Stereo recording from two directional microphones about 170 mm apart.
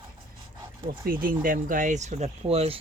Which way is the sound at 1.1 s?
55° right (ahead or behind).